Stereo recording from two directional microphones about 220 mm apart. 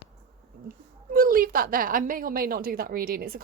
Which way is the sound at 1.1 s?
40° right (ahead or behind).